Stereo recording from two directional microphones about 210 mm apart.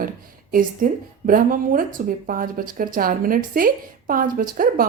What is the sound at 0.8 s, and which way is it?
Speech, 40° right (ahead or behind).